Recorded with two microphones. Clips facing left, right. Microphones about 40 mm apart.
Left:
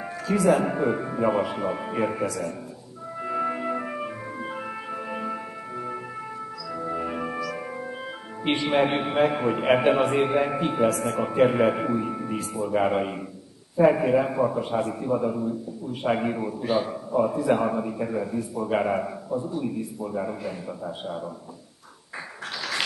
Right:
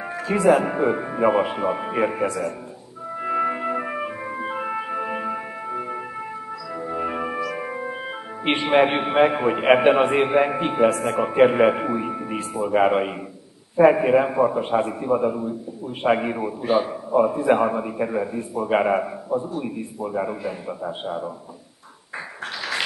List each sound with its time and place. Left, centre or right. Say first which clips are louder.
0.3 s a man's voice: right 3 dB; right
3.2 s music: right 4 dB; right
8.5 s a man's voice: right 4 dB; right